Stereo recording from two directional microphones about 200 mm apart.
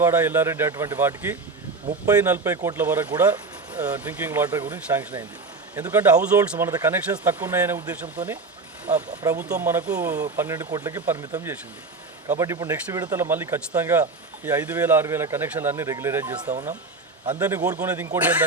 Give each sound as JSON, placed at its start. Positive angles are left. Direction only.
{"t": 0.0, "sound": "speech", "side_deg": -10}
{"t": 3.1, "sound": "speech", "side_deg": -20}
{"t": 3.7, "sound": "speech", "side_deg": -10}